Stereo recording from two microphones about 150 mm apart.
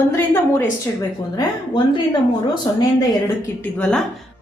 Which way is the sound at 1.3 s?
30° left (ahead or behind).